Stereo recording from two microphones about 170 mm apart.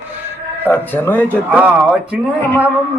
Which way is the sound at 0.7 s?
10° left (ahead or behind).